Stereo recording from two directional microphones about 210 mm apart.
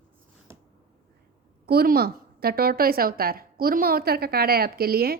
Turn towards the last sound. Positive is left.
turn(degrees=-45)  # may be behind; listen again after turning